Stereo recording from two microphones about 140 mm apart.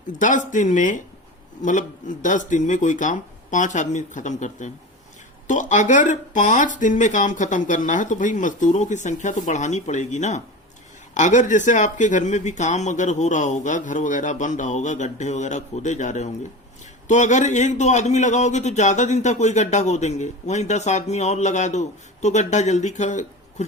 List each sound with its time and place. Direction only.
0.2 s a man's voice: 65° left (ahead or behind)